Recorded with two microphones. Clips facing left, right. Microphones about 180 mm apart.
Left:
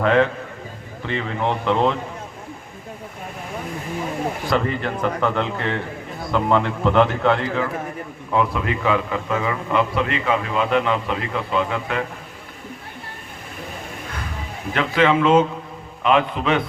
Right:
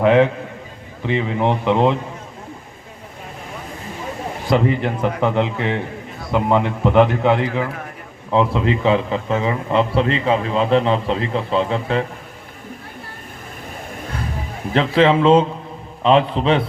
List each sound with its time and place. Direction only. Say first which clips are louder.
0.0 s a man's voice: right 4 dB; 15° right (ahead or behind)
4.4 s a man's voice: right 7 dB; 20° right (ahead or behind)
14.7 s a man's voice: right 3 dB; 30° right (ahead or behind)